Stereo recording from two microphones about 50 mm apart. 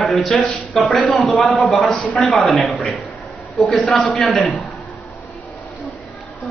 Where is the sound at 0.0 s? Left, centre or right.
Centre.